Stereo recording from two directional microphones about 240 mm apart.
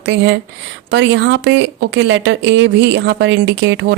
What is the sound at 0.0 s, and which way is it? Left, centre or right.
Speech, right.